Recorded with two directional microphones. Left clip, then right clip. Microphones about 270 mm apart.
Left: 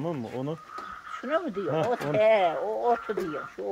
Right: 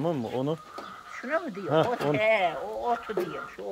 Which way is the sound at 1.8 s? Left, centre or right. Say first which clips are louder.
Left 2 dB; left.